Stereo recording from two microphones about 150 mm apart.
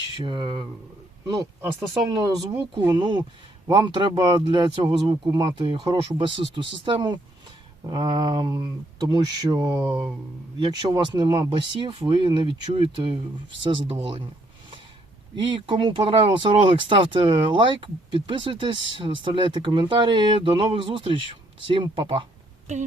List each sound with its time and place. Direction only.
0.1 s speech: 30° right (ahead or behind)
1.9 s speech: 25° right (ahead or behind)
15.5 s speech: 35° right (ahead or behind)